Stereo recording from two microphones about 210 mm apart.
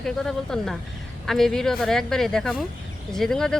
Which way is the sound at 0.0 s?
Centre (ahead or behind).